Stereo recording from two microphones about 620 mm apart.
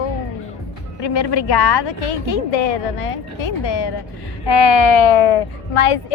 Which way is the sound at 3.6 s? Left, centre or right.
Left.